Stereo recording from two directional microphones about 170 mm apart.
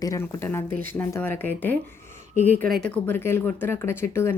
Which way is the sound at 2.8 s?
10° left (ahead or behind).